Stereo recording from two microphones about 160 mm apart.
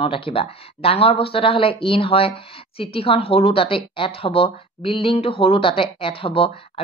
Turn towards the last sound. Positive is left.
turn(degrees=35)  # may be behind; listen again after turning